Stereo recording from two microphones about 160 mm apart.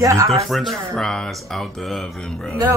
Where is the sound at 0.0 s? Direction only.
20° right (ahead or behind).